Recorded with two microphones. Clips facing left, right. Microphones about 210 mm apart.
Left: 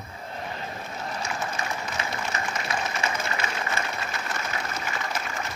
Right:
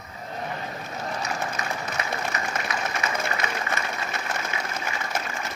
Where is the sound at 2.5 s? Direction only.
55° right (ahead or behind).